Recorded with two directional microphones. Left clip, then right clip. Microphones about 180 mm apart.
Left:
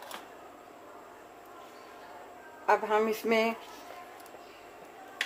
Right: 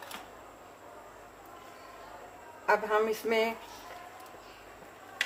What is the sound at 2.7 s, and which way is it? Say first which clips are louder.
Speech: left 1 dB; 30° left (ahead or behind).